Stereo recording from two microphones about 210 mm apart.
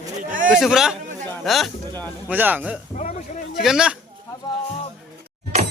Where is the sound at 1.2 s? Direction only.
5° left (ahead or behind).